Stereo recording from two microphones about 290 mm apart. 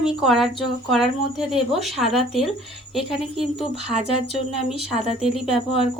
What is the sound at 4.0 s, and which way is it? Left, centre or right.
Speech, left.